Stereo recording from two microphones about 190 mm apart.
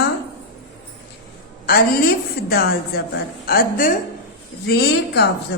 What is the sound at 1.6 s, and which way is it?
A woman's voice, 55° left (ahead or behind).